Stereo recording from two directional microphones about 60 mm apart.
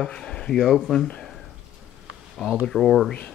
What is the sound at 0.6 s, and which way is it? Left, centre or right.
Speech, centre.